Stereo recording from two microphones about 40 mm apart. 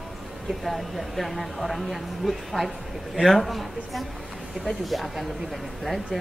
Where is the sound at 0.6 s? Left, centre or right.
Centre.